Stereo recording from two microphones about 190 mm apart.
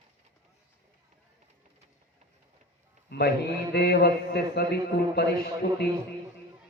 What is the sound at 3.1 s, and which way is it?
A man's voice, 60° left (ahead or behind).